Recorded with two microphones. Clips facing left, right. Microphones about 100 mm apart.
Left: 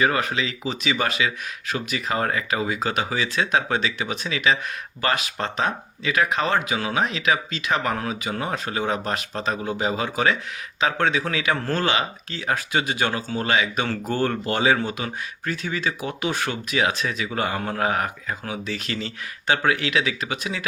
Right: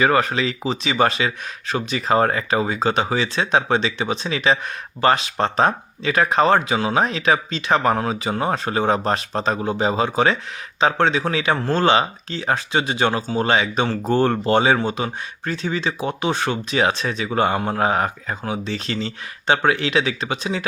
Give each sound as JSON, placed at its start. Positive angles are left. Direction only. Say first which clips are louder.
{"t": 0.0, "sound": "speech", "louder": "right 4 dB", "side_deg": -35}